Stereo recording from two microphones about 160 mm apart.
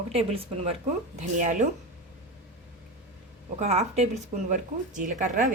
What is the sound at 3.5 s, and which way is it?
A woman's voice, 45° right (ahead or behind).